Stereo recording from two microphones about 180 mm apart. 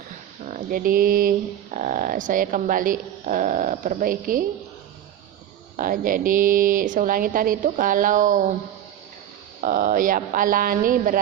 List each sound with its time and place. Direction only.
0.4 s speech: 50° right (ahead or behind)
5.7 s speech: 50° right (ahead or behind)
9.6 s speech: 50° right (ahead or behind)